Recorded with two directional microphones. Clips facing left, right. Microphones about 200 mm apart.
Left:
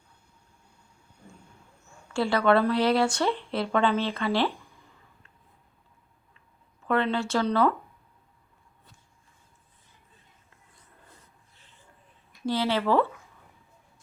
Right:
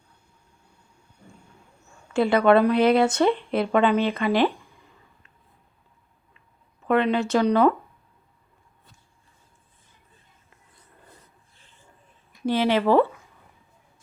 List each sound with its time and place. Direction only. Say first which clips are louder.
2.1 s speech: right 5 dB; 20° right (ahead or behind)
6.8 s speech: right 5 dB; 15° right (ahead or behind)
12.5 s speech: right 5 dB; 15° right (ahead or behind)